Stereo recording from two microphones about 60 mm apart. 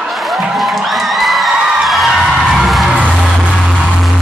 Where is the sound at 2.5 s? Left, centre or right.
Centre.